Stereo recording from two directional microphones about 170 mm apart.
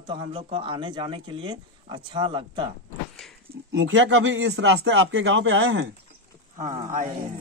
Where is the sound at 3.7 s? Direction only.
90° right.